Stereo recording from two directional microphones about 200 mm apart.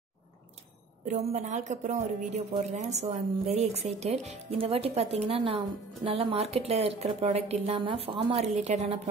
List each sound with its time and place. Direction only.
1.0 s a woman's voice: 35° right (ahead or behind)